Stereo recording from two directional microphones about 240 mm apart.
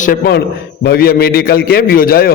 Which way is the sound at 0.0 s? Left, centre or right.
Left.